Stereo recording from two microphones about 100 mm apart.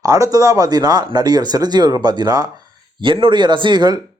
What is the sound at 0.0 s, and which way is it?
Speech, 35° right (ahead or behind).